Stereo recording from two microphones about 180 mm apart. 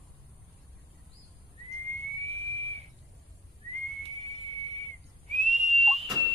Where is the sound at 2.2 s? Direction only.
35° right (ahead or behind).